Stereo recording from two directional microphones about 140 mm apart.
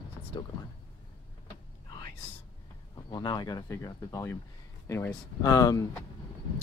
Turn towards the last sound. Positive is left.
turn(degrees=25)  # may be behind; listen again after turning